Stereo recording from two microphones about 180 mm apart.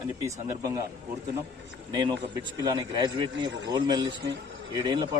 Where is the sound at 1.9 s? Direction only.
20° right (ahead or behind).